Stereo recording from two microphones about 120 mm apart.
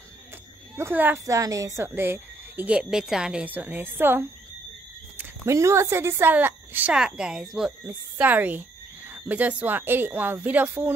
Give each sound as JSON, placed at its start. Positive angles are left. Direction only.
{"t": 0.7, "sound": "a woman's voice", "side_deg": -15}
{"t": 1.2, "sound": "a woman's voice", "side_deg": -30}